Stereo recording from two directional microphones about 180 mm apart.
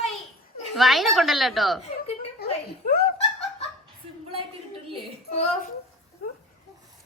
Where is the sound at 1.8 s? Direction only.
35° left (ahead or behind).